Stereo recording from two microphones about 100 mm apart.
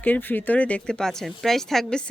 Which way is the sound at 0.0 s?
20° left (ahead or behind).